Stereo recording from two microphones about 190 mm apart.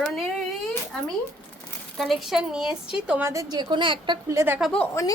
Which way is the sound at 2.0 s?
Centre (ahead or behind).